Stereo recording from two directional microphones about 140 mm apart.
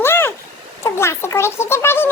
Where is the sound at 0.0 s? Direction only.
15° left (ahead or behind).